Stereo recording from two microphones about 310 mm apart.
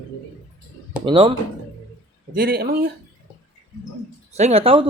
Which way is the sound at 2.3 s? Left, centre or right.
Right.